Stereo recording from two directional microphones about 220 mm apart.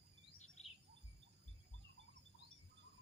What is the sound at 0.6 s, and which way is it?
Bird, 30° left (ahead or behind).